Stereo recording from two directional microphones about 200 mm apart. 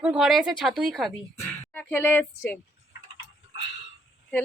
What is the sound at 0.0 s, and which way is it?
A woman's voice, 5° right (ahead or behind).